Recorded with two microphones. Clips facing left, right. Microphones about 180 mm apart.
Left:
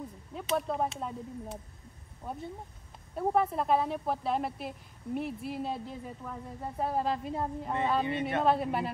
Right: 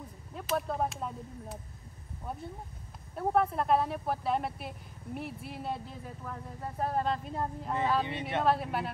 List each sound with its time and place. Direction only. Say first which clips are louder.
0.3 s a woman's voice: left 1 dB; centre (ahead or behind)
8.1 s speech: left 4 dB; 25° right (ahead or behind)
8.4 s a woman's voice: even; centre (ahead or behind)